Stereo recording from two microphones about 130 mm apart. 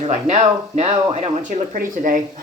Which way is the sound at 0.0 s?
55° right (ahead or behind).